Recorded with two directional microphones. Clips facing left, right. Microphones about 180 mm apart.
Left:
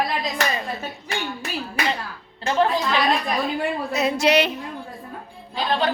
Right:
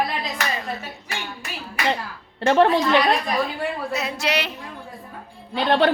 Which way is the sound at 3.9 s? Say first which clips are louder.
Left 9 dB; 20° left (ahead or behind).